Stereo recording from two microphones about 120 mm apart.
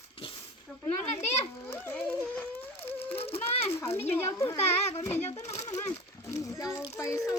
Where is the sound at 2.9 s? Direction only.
55° left (ahead or behind).